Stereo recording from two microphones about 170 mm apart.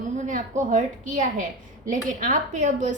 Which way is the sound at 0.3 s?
45° right (ahead or behind).